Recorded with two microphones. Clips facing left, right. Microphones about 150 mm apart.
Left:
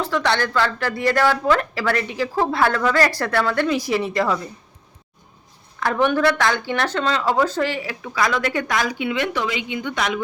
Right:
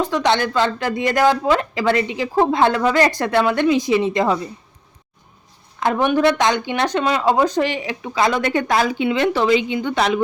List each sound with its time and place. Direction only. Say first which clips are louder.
0.0 s speech: right 3 dB; 20° right (ahead or behind)
5.8 s speech: right 2 dB; 15° right (ahead or behind)